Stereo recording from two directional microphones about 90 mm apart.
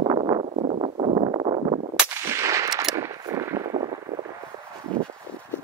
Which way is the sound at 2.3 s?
35° right (ahead or behind).